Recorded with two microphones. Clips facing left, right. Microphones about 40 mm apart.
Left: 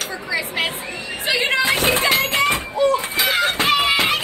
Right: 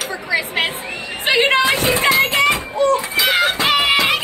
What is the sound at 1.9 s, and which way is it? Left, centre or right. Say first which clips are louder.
Music: right 3 dB; right.